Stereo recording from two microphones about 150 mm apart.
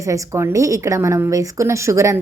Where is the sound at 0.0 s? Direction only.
20° right (ahead or behind).